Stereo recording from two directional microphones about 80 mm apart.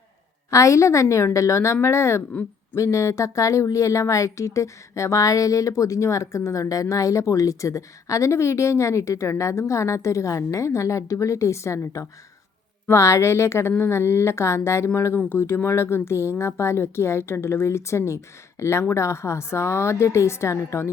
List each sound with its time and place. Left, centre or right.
0.5 s speech: left